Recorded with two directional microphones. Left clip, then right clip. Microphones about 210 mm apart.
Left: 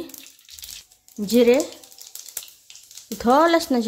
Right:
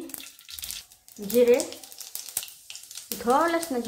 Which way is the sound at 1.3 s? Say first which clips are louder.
Left 3 dB; 55° left (ahead or behind).